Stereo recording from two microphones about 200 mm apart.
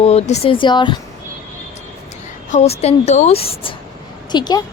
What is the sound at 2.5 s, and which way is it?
Speech, 35° left (ahead or behind).